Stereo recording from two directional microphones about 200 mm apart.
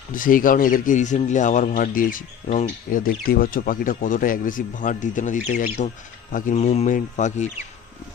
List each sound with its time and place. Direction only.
0.1 s a man's voice: 45° left (ahead or behind)